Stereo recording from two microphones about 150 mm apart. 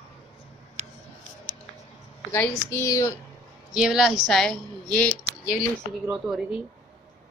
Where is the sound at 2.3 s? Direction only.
15° left (ahead or behind).